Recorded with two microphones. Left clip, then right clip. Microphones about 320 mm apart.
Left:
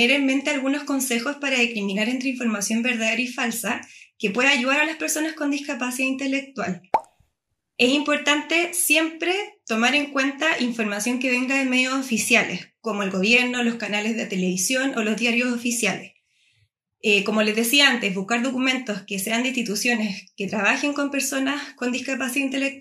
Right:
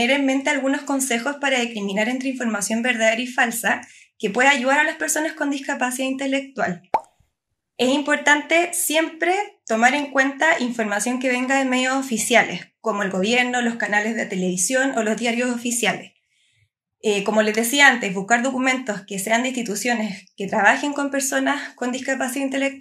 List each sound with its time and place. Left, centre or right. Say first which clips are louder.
0.0 s a woman's voice: even; right
6.9 s plop: left 1 dB; centre
7.7 s a woman's voice: even; right
17.0 s a woman's voice: right 1 dB; right